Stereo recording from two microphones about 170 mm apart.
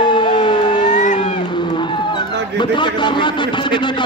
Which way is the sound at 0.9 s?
45° left (ahead or behind).